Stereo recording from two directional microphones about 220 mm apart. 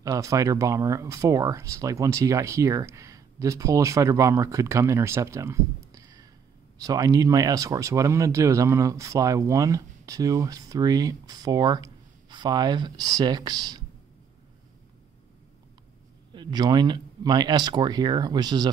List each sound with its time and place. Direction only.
0.0 s speech: 15° right (ahead or behind)
16.3 s speech: 20° right (ahead or behind)